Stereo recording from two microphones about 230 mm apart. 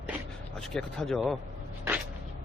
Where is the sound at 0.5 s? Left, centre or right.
Centre.